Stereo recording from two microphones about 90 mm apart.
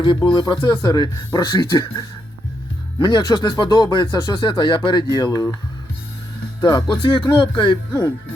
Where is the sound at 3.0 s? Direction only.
60° left (ahead or behind).